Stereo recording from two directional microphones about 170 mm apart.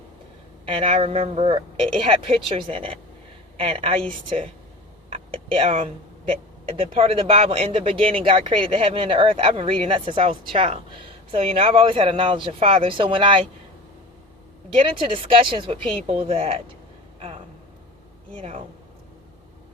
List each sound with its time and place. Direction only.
0.6 s speech: 35° right (ahead or behind)
14.8 s speech: 30° right (ahead or behind)
17.2 s a sound: 35° right (ahead or behind)
18.3 s speech: 35° right (ahead or behind)